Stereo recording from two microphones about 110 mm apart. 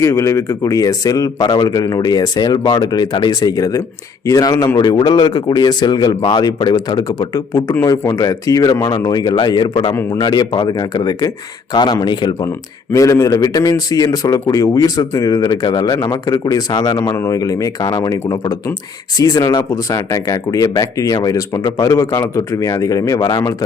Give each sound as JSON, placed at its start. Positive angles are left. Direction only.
{"t": 0.0, "sound": "speech", "side_deg": 25}
{"t": 12.9, "sound": "speech", "side_deg": 30}